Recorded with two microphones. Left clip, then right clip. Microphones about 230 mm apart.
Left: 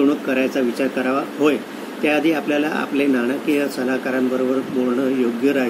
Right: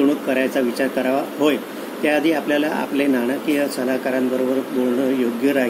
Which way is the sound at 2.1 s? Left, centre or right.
Centre.